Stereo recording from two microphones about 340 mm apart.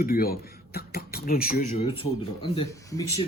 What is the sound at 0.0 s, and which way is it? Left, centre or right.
Speech, left.